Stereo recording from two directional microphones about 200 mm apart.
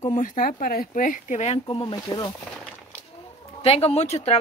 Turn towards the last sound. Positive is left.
turn(degrees=35)  # may be behind; listen again after turning